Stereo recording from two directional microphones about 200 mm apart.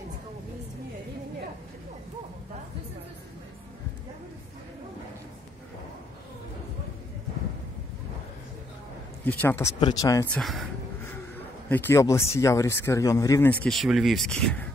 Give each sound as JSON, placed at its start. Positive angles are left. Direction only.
{"t": 9.2, "sound": "speech", "side_deg": 10}
{"t": 10.3, "sound": "speech", "side_deg": 0}
{"t": 11.7, "sound": "speech", "side_deg": 10}